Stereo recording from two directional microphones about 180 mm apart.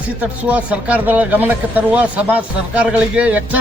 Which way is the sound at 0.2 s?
5° right (ahead or behind).